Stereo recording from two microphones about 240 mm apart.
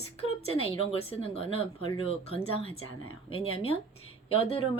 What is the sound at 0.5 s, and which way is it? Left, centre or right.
A woman's voice, left.